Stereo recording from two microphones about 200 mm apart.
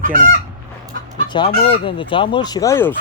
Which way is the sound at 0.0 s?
40° right (ahead or behind).